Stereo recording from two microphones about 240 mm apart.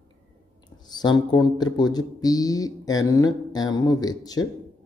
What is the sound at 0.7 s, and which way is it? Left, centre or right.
Speech, centre.